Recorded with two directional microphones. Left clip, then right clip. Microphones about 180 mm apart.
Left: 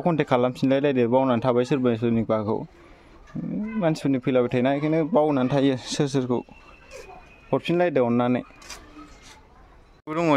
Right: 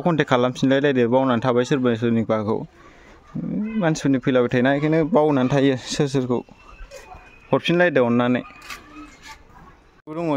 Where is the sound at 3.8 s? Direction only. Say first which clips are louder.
Right 3 dB; 15° right (ahead or behind).